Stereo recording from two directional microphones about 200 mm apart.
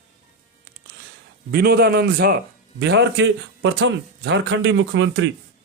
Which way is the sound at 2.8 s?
60° right (ahead or behind).